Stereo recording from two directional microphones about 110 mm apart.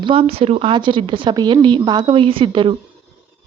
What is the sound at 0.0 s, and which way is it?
Speech, 55° right (ahead or behind).